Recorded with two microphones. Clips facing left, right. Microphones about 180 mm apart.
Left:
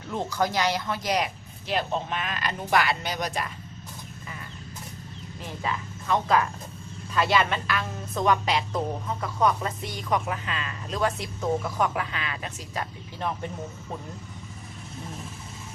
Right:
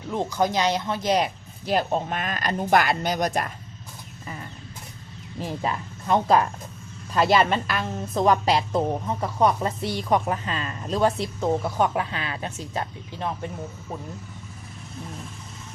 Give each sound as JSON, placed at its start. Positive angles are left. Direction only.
{"t": 0.1, "sound": "speech", "side_deg": -20}
{"t": 5.4, "sound": "a woman's voice", "side_deg": -40}